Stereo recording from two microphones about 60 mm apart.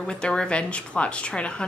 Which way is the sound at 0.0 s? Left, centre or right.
Centre.